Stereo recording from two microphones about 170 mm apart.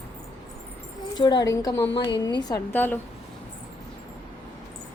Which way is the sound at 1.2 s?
25° left (ahead or behind).